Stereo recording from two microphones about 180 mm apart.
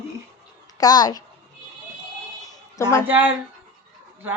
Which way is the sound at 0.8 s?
20° left (ahead or behind).